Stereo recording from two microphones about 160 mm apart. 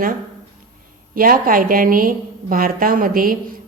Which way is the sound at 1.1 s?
60° right (ahead or behind).